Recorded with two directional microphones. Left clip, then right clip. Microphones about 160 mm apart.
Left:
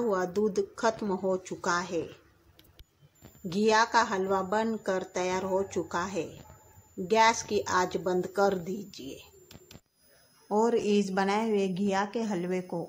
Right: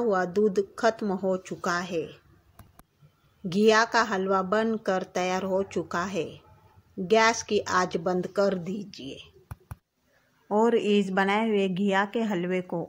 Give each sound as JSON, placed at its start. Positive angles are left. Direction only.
{"t": 0.0, "sound": "a woman's voice", "side_deg": -10}
{"t": 3.4, "sound": "a woman's voice", "side_deg": -15}
{"t": 10.5, "sound": "a woman's voice", "side_deg": -15}